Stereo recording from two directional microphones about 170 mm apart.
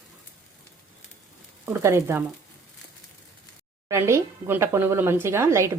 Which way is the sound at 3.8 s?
15° right (ahead or behind).